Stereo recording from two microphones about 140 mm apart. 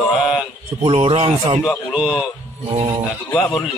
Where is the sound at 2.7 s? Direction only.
40° right (ahead or behind).